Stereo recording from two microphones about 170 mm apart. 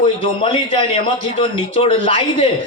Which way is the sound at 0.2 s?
30° left (ahead or behind).